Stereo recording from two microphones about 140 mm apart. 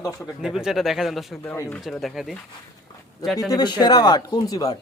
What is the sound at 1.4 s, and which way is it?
Speech, 15° left (ahead or behind).